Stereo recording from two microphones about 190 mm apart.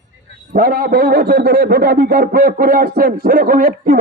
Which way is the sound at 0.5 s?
50° right (ahead or behind).